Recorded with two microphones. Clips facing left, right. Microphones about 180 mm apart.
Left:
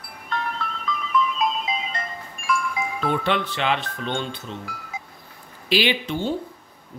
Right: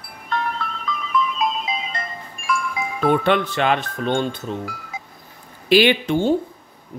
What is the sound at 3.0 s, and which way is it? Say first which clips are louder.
Speech: right 7 dB; 55° right (ahead or behind).